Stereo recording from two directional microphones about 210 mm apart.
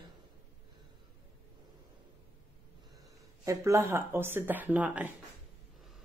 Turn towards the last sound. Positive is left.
turn(degrees=-5)  # may be behind; listen again after turning